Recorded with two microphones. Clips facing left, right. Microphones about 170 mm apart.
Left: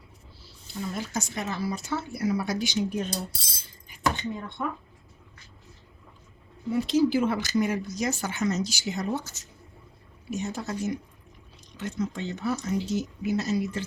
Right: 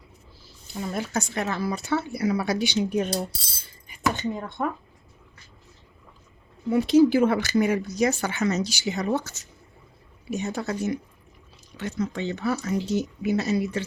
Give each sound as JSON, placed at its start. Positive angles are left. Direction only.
{"t": 0.9, "sound": "speech", "side_deg": -60}
{"t": 4.4, "sound": "speech", "side_deg": -50}
{"t": 6.7, "sound": "speech", "side_deg": -60}